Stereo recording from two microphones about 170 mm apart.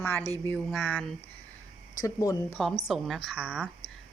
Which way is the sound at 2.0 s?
20° left (ahead or behind).